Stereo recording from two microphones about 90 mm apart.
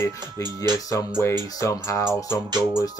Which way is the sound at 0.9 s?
30° left (ahead or behind).